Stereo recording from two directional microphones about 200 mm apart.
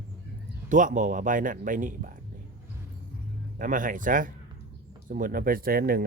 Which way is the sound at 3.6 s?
40° right (ahead or behind).